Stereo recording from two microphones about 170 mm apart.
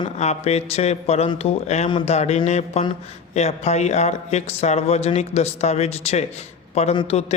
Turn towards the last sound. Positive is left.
turn(degrees=35)  # may be behind; listen again after turning